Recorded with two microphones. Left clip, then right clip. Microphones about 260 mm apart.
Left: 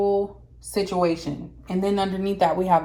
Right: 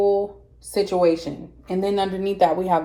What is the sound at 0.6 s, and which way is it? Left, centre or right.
A woman's voice, centre.